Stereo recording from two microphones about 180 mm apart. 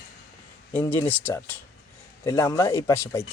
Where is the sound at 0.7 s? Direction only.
10° left (ahead or behind).